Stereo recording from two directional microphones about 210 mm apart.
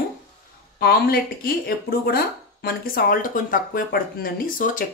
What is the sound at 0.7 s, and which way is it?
Speech, 45° left (ahead or behind).